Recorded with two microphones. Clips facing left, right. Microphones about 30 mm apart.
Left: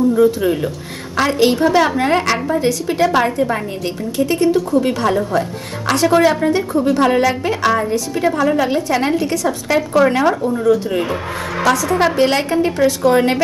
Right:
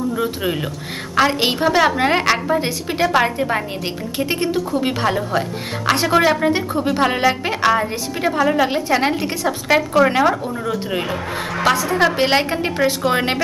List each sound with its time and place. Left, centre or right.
0.1 s a woman's voice: right
6.4 s a woman's voice: right
9.3 s a woman's voice: right
9.8 s a woman's voice: centre
11.6 s a woman's voice: right